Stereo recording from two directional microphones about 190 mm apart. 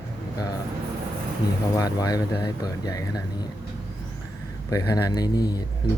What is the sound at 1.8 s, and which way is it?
Speech, 20° left (ahead or behind).